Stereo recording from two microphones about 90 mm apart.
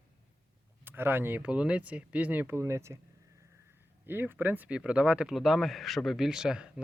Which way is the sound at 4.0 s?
25° right (ahead or behind).